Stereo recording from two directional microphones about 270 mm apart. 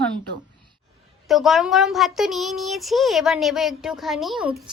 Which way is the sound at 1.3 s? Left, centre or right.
Centre.